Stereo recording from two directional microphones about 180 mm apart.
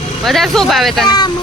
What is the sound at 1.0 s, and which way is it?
Speech, 25° left (ahead or behind).